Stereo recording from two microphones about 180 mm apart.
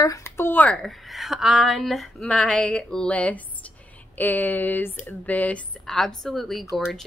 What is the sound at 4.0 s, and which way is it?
A woman's voice, 10° left (ahead or behind).